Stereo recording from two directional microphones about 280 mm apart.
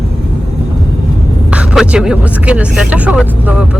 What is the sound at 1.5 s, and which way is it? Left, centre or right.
Speech, centre.